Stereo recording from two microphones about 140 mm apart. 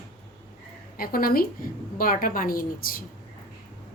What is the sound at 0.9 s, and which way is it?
A woman's voice, 90° left.